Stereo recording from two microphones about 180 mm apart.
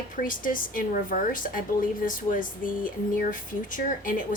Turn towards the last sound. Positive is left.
turn(degrees=50)  # may be behind; listen again after turning